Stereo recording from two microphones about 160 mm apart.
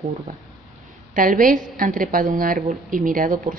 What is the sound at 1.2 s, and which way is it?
A woman's voice, 60° right (ahead or behind).